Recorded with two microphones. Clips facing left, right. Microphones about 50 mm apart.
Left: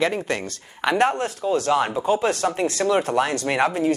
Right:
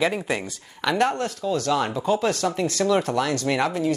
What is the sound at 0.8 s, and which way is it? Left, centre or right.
Speech, left.